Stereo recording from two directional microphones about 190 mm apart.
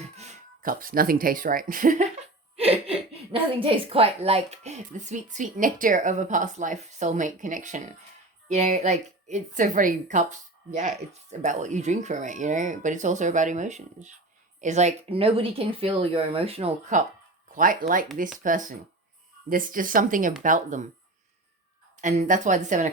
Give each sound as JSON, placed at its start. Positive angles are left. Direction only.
{"t": 0.0, "sound": "speech", "side_deg": -35}
{"t": 2.6, "sound": "speech", "side_deg": -30}
{"t": 17.5, "sound": "speech", "side_deg": -45}
{"t": 22.0, "sound": "speech", "side_deg": -40}